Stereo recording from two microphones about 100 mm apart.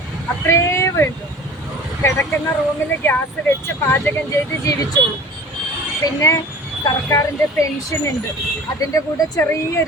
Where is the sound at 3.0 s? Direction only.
20° left (ahead or behind).